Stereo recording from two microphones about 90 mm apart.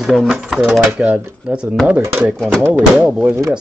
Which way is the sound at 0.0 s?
5° right (ahead or behind).